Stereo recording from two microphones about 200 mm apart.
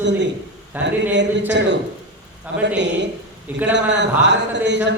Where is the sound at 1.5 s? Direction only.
60° right (ahead or behind).